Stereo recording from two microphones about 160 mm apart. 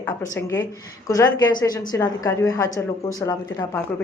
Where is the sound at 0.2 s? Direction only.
20° left (ahead or behind).